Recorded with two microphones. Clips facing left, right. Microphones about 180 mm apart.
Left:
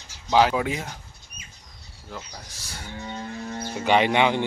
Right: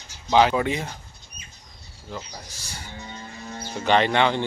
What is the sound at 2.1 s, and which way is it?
Speech, centre (ahead or behind).